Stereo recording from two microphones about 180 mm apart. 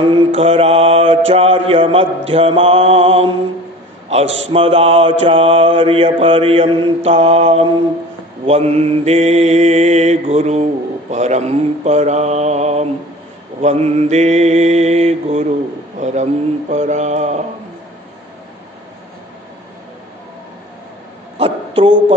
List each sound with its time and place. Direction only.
0.4 s mantra: 30° right (ahead or behind)
4.5 s mantra: 30° right (ahead or behind)
21.4 s a sound: 30° right (ahead or behind)